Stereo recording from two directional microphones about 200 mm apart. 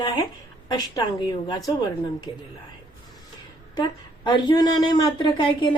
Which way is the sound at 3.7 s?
20° left (ahead or behind).